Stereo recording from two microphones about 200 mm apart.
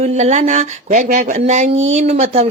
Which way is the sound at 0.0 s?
35° right (ahead or behind).